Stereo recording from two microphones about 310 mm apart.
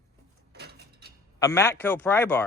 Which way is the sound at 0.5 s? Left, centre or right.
Right.